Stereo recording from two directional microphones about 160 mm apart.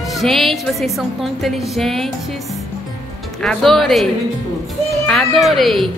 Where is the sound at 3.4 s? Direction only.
Centre (ahead or behind).